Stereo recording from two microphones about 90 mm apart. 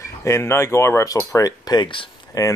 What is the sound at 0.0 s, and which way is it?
Speech, 30° left (ahead or behind).